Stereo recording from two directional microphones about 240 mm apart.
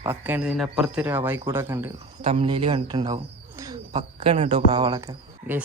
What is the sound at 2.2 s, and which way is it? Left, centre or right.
Speech, right.